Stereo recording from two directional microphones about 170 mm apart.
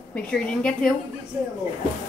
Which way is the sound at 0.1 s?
5° left (ahead or behind).